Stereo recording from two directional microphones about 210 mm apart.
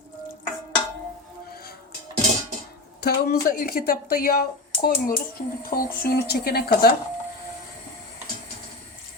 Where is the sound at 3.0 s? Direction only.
45° left (ahead or behind).